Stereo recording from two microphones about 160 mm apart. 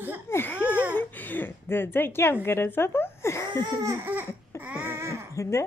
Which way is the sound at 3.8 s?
15° right (ahead or behind).